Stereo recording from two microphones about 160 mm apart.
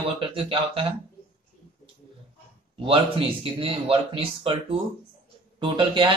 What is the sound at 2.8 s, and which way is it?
A man's voice, 35° right (ahead or behind).